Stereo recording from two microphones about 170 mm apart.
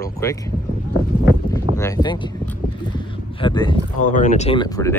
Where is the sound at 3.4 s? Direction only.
30° left (ahead or behind).